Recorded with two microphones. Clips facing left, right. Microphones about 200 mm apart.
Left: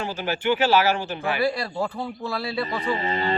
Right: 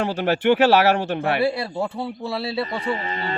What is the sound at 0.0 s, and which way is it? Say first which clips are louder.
Speech: right 6 dB; 65° right (ahead or behind).